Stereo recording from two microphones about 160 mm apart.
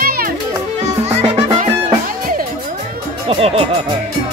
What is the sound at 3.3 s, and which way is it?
Music, 35° right (ahead or behind).